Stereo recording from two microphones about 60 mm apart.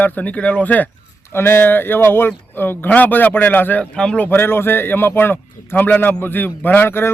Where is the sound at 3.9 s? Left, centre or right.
Centre.